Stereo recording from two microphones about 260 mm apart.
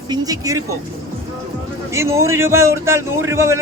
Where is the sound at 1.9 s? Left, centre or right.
Centre.